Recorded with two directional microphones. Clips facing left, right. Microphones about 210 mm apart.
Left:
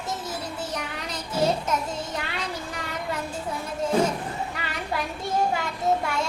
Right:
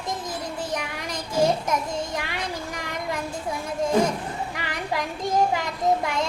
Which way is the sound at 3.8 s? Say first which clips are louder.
Right 1 dB; 15° right (ahead or behind).